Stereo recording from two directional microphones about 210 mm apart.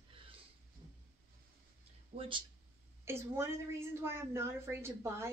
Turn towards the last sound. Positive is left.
turn(degrees=-10)  # may be behind; listen again after turning